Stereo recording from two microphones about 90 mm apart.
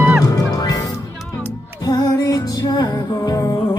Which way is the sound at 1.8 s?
45° left (ahead or behind).